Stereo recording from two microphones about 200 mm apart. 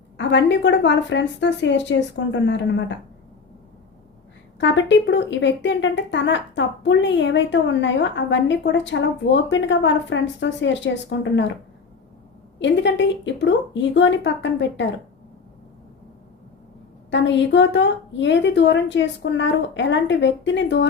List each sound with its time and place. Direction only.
0.2 s a woman's voice: 65° left (ahead or behind)
4.6 s a woman's voice: 65° left (ahead or behind)
12.5 s a woman's voice: 65° left (ahead or behind)
17.1 s a woman's voice: 65° left (ahead or behind)